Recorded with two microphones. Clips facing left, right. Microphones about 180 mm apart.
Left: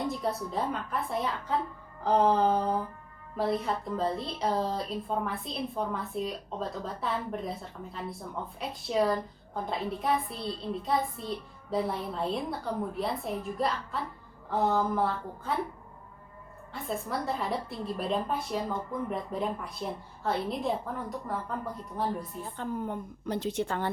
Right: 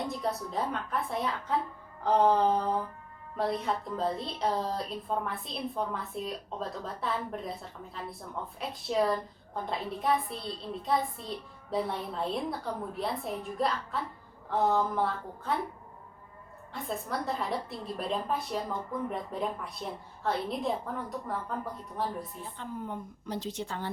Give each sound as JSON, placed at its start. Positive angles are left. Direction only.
{"t": 0.1, "sound": "a woman's voice", "side_deg": 0}
{"t": 16.7, "sound": "a woman's voice", "side_deg": 0}
{"t": 22.5, "sound": "a woman's voice", "side_deg": 55}